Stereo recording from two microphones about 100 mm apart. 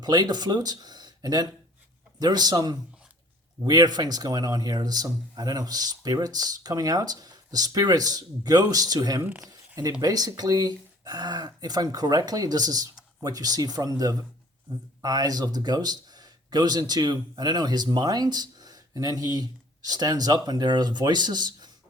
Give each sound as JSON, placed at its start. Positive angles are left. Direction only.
{"t": 0.0, "sound": "speech", "side_deg": -45}
{"t": 9.4, "sound": "a sound", "side_deg": -40}
{"t": 10.0, "sound": "speech", "side_deg": -40}